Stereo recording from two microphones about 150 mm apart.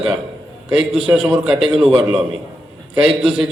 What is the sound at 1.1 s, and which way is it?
Speech, 15° right (ahead or behind).